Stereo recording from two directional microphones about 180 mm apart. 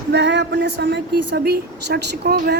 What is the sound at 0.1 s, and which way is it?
Speech, 75° right (ahead or behind).